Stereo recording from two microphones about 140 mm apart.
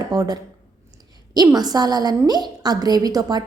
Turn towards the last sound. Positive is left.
turn(degrees=-25)  # may be behind; listen again after turning